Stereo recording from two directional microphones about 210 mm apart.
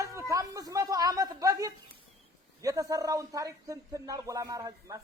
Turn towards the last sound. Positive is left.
turn(degrees=-15)  # may be behind; listen again after turning